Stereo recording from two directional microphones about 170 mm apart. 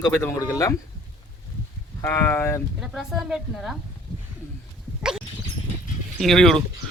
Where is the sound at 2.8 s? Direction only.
Centre (ahead or behind).